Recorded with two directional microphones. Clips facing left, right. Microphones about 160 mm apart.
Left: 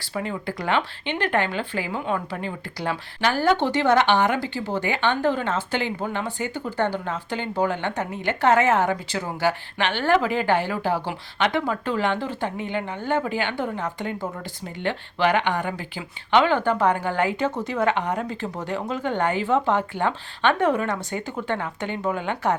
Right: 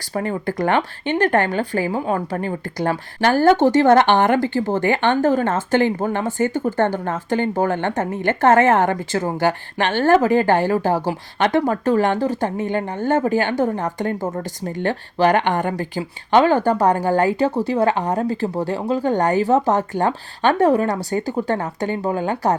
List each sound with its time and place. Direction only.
0.0 s speech: 45° right (ahead or behind)